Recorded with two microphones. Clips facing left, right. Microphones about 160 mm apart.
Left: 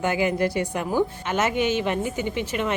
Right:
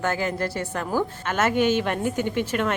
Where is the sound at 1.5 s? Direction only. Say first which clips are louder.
Right 5 dB; 50° right (ahead or behind).